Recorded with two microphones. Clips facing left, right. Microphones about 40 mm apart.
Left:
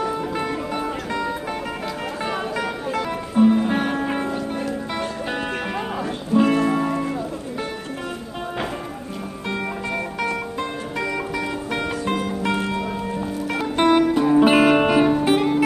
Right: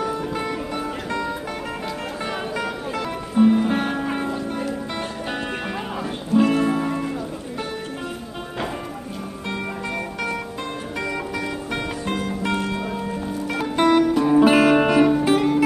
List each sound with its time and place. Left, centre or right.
0.0 s music: centre
2.5 s music: centre
6.3 s music: centre
12.3 s music: centre